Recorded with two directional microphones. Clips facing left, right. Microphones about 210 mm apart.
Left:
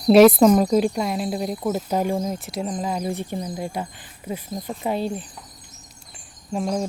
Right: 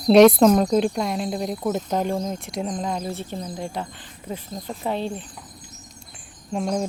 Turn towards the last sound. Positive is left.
turn(degrees=0)  # may be behind; listen again after turning